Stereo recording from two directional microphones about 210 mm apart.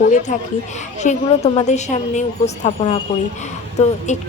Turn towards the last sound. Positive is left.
turn(degrees=35)  # may be behind; listen again after turning